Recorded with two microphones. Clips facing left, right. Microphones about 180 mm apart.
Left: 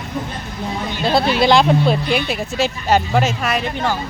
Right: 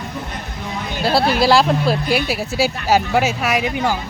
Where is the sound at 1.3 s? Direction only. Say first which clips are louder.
Left 1 dB; 5° right (ahead or behind).